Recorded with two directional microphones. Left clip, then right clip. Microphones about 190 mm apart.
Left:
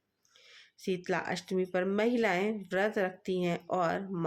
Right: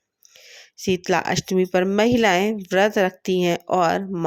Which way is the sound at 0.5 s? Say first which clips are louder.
Right 12 dB; 45° right (ahead or behind).